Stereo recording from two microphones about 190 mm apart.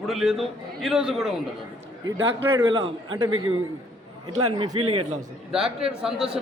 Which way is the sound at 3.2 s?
90° right.